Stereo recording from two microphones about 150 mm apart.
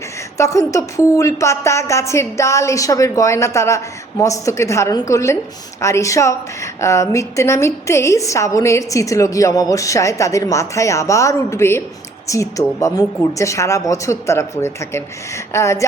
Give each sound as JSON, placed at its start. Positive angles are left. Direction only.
{"t": 0.3, "sound": "a woman's voice", "side_deg": 20}